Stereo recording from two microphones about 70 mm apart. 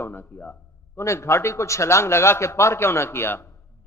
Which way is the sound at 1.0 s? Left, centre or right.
Left.